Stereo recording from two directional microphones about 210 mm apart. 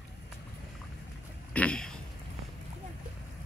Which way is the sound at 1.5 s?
5° left (ahead or behind).